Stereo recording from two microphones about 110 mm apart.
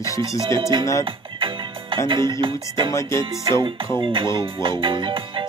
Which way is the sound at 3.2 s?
45° right (ahead or behind).